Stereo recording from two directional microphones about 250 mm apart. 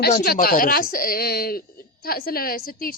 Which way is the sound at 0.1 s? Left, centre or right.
Left.